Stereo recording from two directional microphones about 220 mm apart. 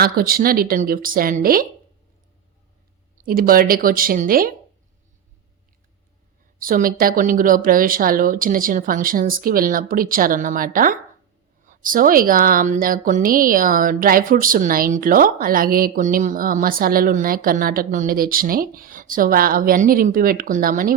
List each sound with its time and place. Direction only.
0.0 s speech: 40° right (ahead or behind)
3.2 s speech: 40° right (ahead or behind)
6.6 s speech: 40° right (ahead or behind)